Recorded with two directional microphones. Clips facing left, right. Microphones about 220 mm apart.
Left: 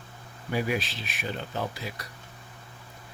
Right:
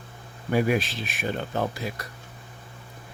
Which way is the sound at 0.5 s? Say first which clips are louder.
Right 6 dB; 50° right (ahead or behind).